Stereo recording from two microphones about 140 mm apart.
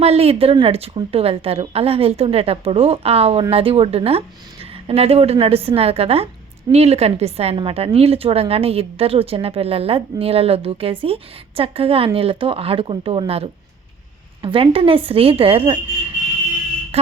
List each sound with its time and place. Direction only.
0.0 s a woman's voice: 45° right (ahead or behind)
16.9 s quack: 45° right (ahead or behind)